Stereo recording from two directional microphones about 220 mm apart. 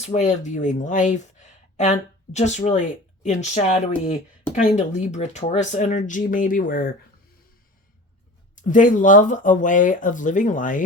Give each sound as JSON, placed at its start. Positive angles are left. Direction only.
{"t": 0.0, "sound": "speech", "side_deg": 35}
{"t": 8.6, "sound": "speech", "side_deg": 35}